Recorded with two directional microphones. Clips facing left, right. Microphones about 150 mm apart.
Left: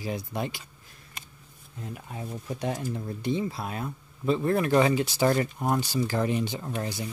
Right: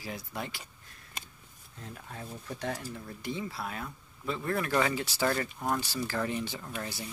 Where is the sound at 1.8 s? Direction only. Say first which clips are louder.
Left 5 dB; 15° left (ahead or behind).